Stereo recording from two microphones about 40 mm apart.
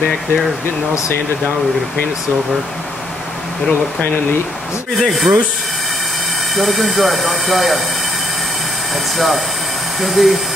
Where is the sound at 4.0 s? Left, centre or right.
Left.